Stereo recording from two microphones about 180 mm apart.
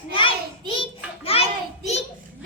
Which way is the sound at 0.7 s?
30° left (ahead or behind).